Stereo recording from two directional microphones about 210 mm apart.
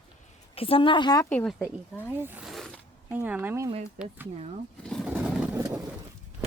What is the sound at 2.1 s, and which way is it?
Zipper, 10° right (ahead or behind).